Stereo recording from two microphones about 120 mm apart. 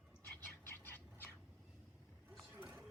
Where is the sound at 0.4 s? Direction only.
15° left (ahead or behind).